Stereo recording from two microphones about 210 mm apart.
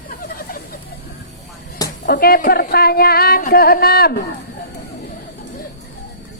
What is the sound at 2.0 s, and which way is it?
A woman's voice, 45° left (ahead or behind).